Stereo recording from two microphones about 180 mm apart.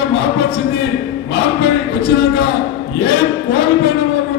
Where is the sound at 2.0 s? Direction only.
70° left (ahead or behind).